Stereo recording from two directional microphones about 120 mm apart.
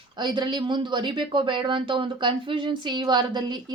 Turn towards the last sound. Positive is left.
turn(degrees=-40)  # may be behind; listen again after turning